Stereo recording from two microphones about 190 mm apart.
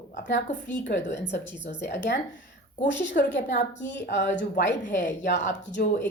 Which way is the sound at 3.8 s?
65° left (ahead or behind).